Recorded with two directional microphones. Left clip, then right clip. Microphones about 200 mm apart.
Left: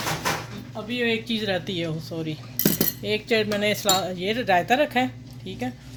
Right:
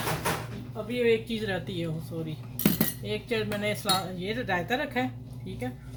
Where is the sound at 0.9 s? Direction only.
50° left (ahead or behind).